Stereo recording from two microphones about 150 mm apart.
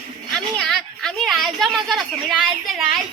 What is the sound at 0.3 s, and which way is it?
A woman's voice, 5° left (ahead or behind).